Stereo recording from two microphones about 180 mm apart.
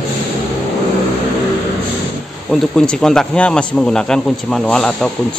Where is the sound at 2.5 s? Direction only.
Centre (ahead or behind).